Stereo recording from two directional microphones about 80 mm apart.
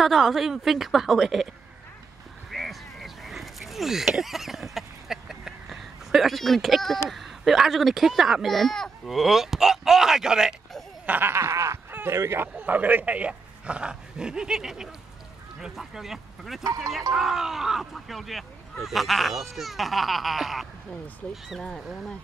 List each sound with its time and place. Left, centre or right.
0.0 s speech: centre
2.5 s a sound: centre
7.1 s speech: centre
11.1 s snicker: right
11.9 s speech: right
12.5 s speech: right; by 20.6 s centre